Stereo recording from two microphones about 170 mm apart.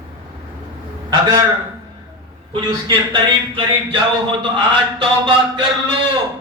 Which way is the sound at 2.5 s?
25° right (ahead or behind).